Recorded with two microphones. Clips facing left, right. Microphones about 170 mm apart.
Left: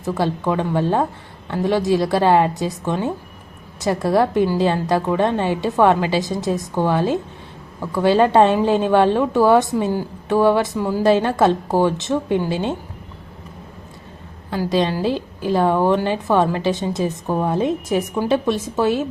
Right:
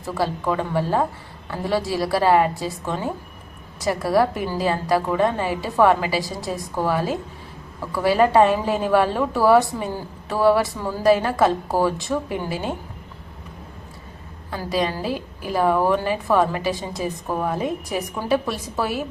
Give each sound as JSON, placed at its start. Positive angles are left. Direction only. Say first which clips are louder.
{"t": 0.0, "sound": "a woman's voice", "louder": "left 3 dB", "side_deg": 20}
{"t": 11.0, "sound": "a woman's voice", "louder": "left 1 dB", "side_deg": 25}
{"t": 15.0, "sound": "a woman's voice", "louder": "left 6 dB", "side_deg": 25}